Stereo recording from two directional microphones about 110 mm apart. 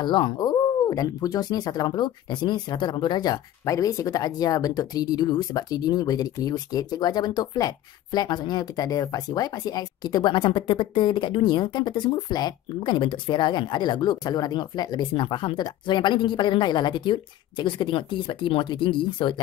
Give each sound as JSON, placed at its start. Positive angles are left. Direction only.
{"t": 0.0, "sound": "speech", "side_deg": 45}
{"t": 3.6, "sound": "speech", "side_deg": 30}